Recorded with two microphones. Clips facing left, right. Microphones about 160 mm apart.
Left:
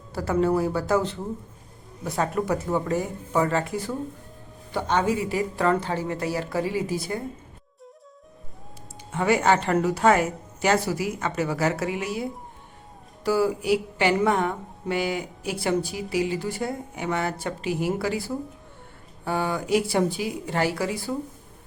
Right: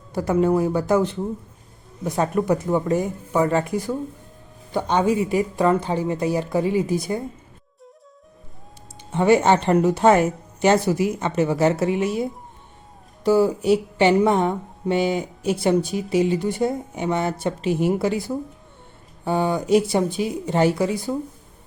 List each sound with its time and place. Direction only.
0.1 s a woman's voice: 15° right (ahead or behind)
9.1 s speech: 25° right (ahead or behind)